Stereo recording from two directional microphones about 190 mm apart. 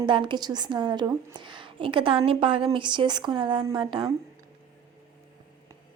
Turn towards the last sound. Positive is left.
turn(degrees=-25)  # may be behind; listen again after turning